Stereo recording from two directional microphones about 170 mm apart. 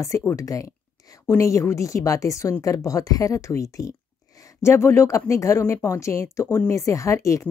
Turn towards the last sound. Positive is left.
turn(degrees=20)  # may be behind; listen again after turning